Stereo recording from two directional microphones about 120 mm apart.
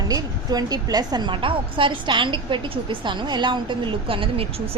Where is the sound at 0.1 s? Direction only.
30° right (ahead or behind).